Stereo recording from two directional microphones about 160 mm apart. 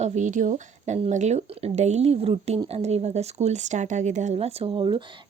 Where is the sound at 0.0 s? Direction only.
50° right (ahead or behind).